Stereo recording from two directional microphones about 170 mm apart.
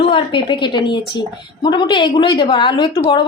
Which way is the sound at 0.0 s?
30° left (ahead or behind).